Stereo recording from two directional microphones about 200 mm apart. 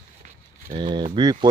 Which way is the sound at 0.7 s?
25° right (ahead or behind).